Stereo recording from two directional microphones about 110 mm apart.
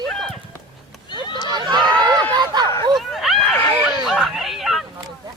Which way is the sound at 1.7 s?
40° right (ahead or behind).